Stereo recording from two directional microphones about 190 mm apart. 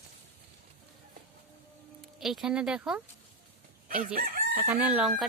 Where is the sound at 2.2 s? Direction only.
Centre (ahead or behind).